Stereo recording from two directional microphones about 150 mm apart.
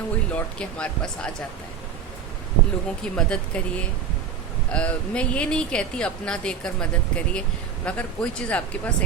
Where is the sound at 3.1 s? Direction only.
5° left (ahead or behind).